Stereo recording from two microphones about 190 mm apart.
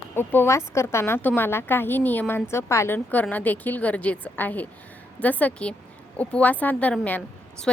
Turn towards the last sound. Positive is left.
turn(degrees=10)  # may be behind; listen again after turning